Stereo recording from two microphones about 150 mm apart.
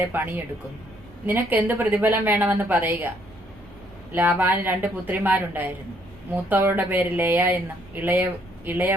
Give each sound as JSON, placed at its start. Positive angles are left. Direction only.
{"t": 0.0, "sound": "a woman's voice", "side_deg": -15}
{"t": 4.1, "sound": "a woman's voice", "side_deg": -15}